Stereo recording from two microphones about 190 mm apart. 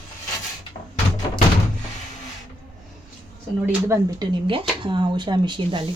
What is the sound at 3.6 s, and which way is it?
Speech, 15° right (ahead or behind).